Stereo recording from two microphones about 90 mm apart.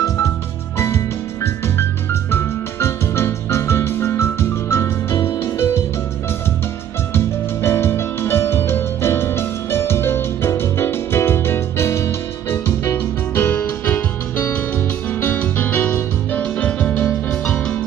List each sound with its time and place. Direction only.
0.7 s music: 30° left (ahead or behind)
7.2 s music: 30° left (ahead or behind); by 17.7 s 10° left (ahead or behind)